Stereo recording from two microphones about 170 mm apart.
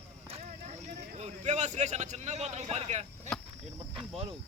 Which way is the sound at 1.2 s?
40° right (ahead or behind).